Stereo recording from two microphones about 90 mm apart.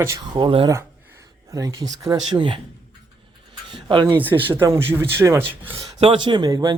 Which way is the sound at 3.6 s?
65° right (ahead or behind).